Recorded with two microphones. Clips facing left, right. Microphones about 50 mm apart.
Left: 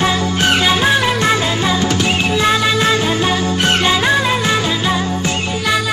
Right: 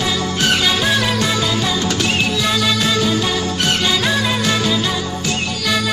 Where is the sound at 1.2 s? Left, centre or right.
Left.